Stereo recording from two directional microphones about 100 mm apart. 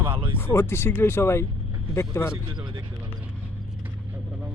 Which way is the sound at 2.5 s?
50° right (ahead or behind).